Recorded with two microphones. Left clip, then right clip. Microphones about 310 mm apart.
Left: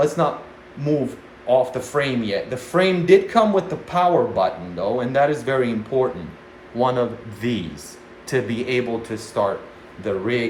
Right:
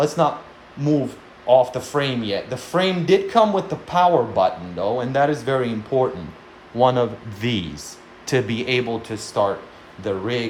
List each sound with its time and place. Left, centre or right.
0.2 s speech: centre
1.5 s a man's voice: centre